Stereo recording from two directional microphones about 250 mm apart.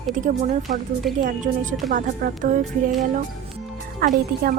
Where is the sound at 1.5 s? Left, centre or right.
Right.